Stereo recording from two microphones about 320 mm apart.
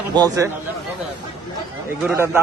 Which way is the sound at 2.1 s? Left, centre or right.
Centre.